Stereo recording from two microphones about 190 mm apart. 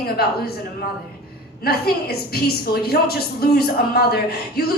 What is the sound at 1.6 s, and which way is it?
Speech, 55° left (ahead or behind).